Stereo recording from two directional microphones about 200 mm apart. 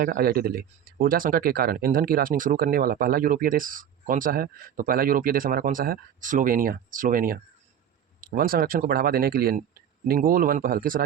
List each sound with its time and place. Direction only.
0.0 s speech: 50° right (ahead or behind)